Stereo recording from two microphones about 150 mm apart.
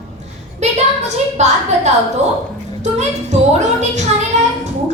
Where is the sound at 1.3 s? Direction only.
50° right (ahead or behind).